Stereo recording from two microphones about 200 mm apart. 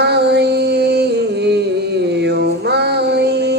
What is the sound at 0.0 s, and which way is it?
Music, 55° right (ahead or behind).